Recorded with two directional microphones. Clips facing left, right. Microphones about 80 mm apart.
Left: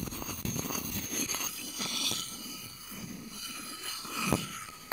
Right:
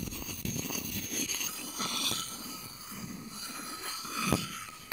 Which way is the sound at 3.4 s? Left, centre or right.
Right.